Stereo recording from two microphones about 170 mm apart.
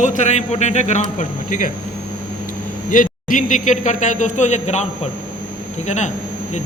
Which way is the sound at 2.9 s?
50° left (ahead or behind).